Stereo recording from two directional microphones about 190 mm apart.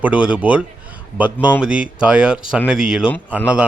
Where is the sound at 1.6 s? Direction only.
5° right (ahead or behind).